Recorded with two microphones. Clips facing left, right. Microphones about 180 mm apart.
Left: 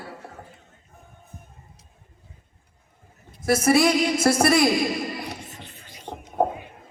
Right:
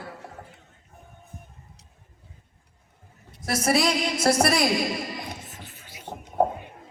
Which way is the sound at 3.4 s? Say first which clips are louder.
Left 5 dB; 50° left (ahead or behind).